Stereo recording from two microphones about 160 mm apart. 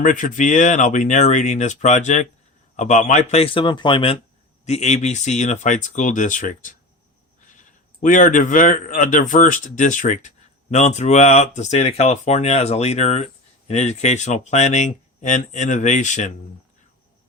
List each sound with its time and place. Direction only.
0.0 s a man's voice: 55° left (ahead or behind); by 4.2 s 35° left (ahead or behind)
4.6 s speech: 45° left (ahead or behind)
8.0 s speech: 55° left (ahead or behind)